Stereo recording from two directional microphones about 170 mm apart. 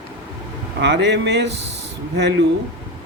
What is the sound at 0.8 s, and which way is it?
Speech, 90° right.